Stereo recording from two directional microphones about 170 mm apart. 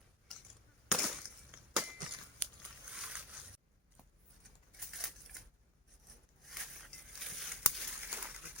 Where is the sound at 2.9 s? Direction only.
5° right (ahead or behind).